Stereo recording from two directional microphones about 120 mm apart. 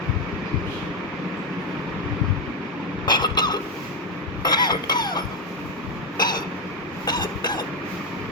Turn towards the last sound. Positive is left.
turn(degrees=40)  # may be behind; listen again after turning